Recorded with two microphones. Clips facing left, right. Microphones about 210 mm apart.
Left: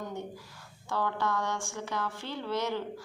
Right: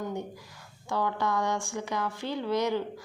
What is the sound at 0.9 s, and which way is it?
A woman's voice, 15° right (ahead or behind).